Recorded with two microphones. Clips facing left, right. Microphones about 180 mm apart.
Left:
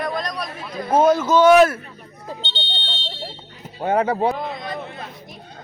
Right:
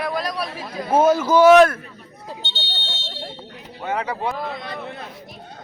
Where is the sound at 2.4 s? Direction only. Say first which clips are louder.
Left 2 dB; 20° left (ahead or behind).